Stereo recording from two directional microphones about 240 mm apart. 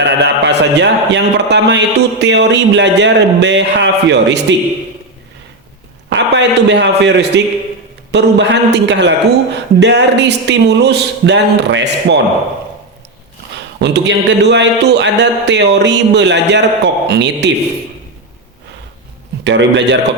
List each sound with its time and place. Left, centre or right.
0.0 s a man's voice: right
6.1 s a man's voice: right
13.8 s a man's voice: right
19.5 s a man's voice: right